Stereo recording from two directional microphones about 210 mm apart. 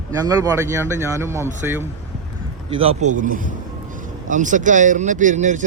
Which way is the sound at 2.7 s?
30° right (ahead or behind).